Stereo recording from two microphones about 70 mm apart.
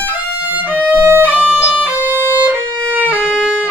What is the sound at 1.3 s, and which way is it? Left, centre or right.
Music, right.